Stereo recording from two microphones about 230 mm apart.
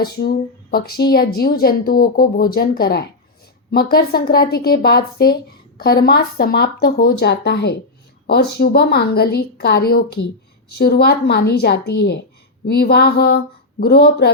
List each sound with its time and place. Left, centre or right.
0.0 s a woman's voice: left